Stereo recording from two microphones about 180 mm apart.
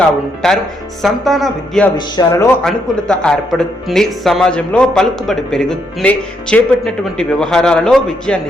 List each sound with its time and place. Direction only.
0.4 s speech: centre (ahead or behind)
2.0 s speech: 25° left (ahead or behind)
2.6 s speech: 5° left (ahead or behind)